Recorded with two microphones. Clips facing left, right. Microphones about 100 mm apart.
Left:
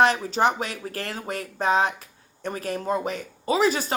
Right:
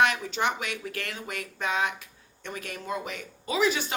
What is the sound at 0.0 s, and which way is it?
Speech, 35° left (ahead or behind).